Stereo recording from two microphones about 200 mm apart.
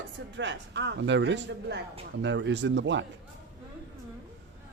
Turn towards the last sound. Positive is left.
turn(degrees=-65)  # may be behind; listen again after turning